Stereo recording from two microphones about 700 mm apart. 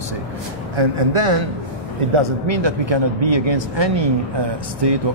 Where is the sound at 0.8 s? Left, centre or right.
Right.